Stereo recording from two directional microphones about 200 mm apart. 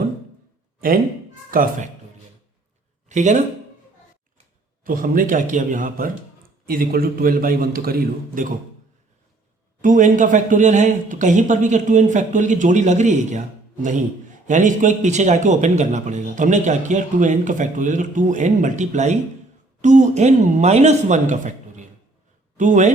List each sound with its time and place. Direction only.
1.5 s a man's voice: 45° right (ahead or behind)
3.1 s a man's voice: 35° right (ahead or behind)
4.8 s a man's voice: 45° right (ahead or behind)
9.8 s a man's voice: 40° right (ahead or behind)
14.4 s a man's voice: 40° right (ahead or behind)